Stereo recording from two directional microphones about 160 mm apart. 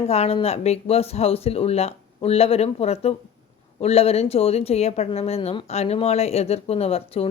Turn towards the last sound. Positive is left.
turn(degrees=40)  # may be behind; listen again after turning